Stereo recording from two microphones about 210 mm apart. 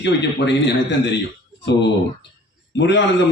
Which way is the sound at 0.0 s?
55° left (ahead or behind).